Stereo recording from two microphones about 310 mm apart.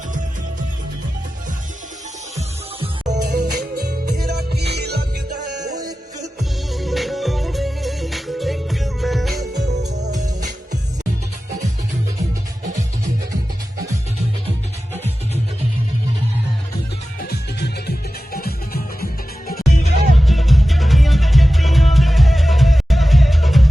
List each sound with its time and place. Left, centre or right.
2.8 s music: right
6.7 s music: centre
9.6 s music: right
17.2 s music: left
20.1 s music: centre